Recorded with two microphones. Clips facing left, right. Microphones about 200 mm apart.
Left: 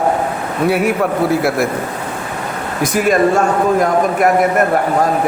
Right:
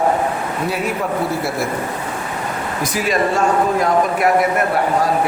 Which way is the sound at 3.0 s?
50° left (ahead or behind).